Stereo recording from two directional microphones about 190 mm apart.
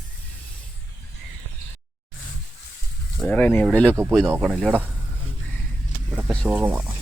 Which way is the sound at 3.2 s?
5° left (ahead or behind).